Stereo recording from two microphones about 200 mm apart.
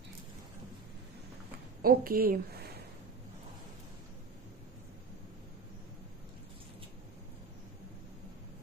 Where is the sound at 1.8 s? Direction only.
45° right (ahead or behind).